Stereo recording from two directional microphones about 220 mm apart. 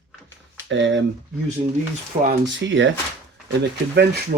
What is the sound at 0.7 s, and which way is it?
Speech, 60° right (ahead or behind).